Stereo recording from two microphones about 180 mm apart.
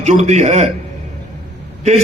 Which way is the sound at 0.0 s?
40° right (ahead or behind).